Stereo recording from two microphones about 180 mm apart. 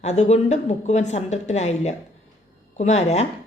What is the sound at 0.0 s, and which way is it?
A woman's voice, 40° left (ahead or behind).